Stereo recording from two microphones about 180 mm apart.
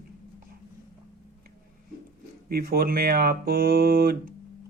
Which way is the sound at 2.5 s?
55° right (ahead or behind).